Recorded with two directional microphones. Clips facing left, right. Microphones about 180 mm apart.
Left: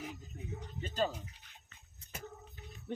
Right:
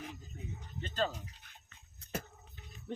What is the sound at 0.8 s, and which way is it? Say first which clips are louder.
Speech: even; 10° left (ahead or behind).